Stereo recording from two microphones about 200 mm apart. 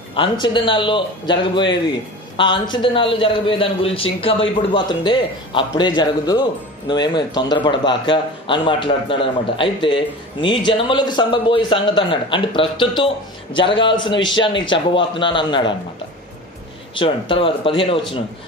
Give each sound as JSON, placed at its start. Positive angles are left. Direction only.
{"t": 0.1, "sound": "a man's voice", "side_deg": 25}
{"t": 16.9, "sound": "a man's voice", "side_deg": 25}